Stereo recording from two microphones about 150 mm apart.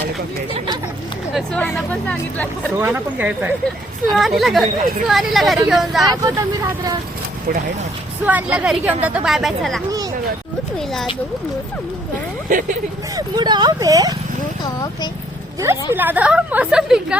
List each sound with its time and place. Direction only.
1.5 s speech: 10° left (ahead or behind)
2.7 s a woman's voice: 15° right (ahead or behind)
6.0 s speech: 25° right (ahead or behind)
8.3 s a woman's voice: 10° right (ahead or behind)
12.5 s speech: 60° right (ahead or behind)
13.1 s speech: 30° right (ahead or behind)
14.6 s speech: 30° left (ahead or behind)
15.6 s a woman's voice: 15° right (ahead or behind)